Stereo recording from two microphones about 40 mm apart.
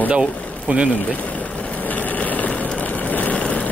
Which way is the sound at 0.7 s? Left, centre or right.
Right.